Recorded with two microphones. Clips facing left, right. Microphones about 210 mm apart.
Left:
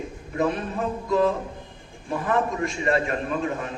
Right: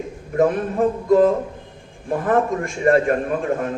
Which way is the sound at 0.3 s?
50° right (ahead or behind).